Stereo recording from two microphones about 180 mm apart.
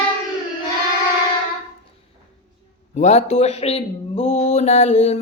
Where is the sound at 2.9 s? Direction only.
40° left (ahead or behind).